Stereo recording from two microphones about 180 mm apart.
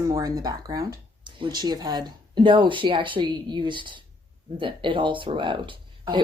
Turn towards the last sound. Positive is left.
turn(degrees=-25)  # may be behind; listen again after turning